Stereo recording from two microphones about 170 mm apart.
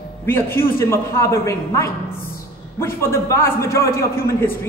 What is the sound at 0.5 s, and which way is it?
A woman's voice, 15° left (ahead or behind).